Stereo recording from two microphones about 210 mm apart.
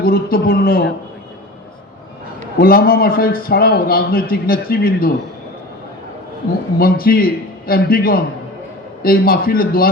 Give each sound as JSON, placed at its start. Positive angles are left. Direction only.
{"t": 0.0, "sound": "a man's voice", "side_deg": 45}
{"t": 2.6, "sound": "a man's voice", "side_deg": 45}
{"t": 6.7, "sound": "a man's voice", "side_deg": 45}